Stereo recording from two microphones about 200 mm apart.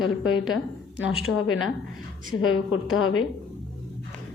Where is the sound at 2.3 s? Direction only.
85° left.